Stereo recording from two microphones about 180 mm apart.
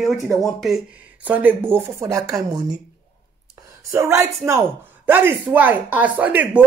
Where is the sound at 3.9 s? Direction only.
15° right (ahead or behind).